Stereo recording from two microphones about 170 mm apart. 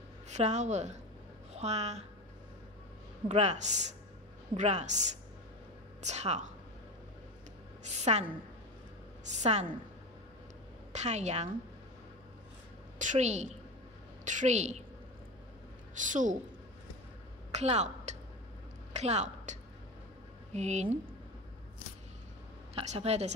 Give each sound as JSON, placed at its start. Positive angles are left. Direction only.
{"t": 0.3, "sound": "a woman's voice", "side_deg": -40}
{"t": 3.3, "sound": "speech", "side_deg": -40}
{"t": 8.0, "sound": "a woman's voice", "side_deg": -40}
{"t": 10.9, "sound": "a woman's voice", "side_deg": -40}
{"t": 13.0, "sound": "a woman's voice", "side_deg": -45}
{"t": 15.9, "sound": "a woman's voice", "side_deg": -50}
{"t": 17.5, "sound": "a woman's voice", "side_deg": -40}
{"t": 22.8, "sound": "a woman's voice", "side_deg": -40}